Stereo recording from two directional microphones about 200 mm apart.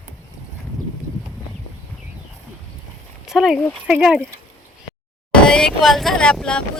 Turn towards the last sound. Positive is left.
turn(degrees=5)  # may be behind; listen again after turning